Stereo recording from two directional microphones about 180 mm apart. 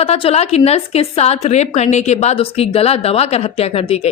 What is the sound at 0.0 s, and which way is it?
A woman's voice, 35° left (ahead or behind).